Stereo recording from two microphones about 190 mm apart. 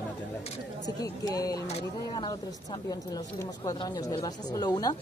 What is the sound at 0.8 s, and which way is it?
Speech, 20° left (ahead or behind).